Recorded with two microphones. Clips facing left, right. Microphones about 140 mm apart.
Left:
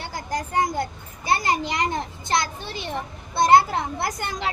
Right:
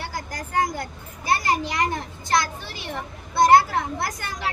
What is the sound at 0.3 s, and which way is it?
A child's voice, 25° left (ahead or behind).